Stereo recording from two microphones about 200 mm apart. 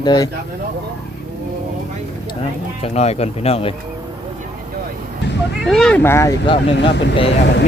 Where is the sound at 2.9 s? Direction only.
30° left (ahead or behind).